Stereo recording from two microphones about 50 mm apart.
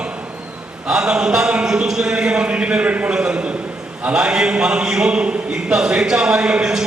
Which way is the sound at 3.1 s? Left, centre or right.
Centre.